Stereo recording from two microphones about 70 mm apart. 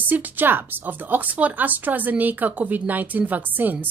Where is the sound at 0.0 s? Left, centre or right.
Right.